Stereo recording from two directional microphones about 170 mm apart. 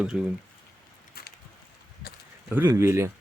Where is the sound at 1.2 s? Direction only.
70° left (ahead or behind).